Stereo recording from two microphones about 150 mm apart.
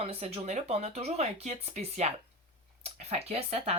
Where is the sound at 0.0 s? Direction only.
40° right (ahead or behind).